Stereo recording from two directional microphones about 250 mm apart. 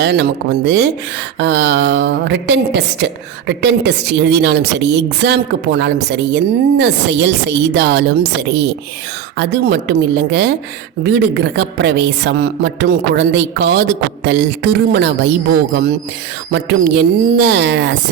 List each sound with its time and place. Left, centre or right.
0.0 s a woman's voice: right